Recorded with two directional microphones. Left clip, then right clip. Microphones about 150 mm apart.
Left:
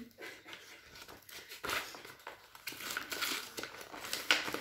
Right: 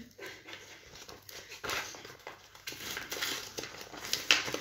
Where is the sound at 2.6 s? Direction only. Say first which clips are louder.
Right 1 dB; 35° left (ahead or behind).